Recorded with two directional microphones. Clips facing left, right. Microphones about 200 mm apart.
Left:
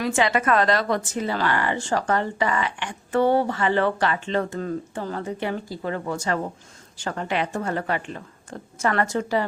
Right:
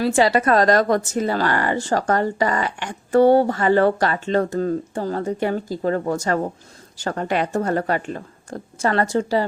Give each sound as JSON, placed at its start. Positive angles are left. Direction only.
{"t": 0.0, "sound": "speech", "side_deg": -35}